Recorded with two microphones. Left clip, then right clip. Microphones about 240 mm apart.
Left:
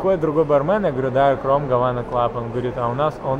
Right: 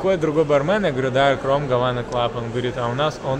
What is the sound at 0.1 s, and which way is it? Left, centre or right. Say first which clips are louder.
A man's voice: left 1 dB; right.